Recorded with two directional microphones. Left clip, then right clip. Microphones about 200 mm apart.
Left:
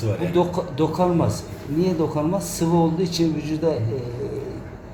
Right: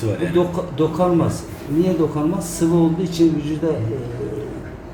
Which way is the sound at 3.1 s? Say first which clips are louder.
Right 5 dB; 40° left (ahead or behind).